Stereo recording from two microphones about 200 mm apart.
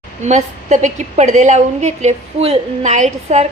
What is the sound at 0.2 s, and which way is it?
A woman's voice, 35° right (ahead or behind).